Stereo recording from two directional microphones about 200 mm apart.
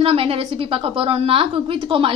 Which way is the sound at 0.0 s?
30° right (ahead or behind).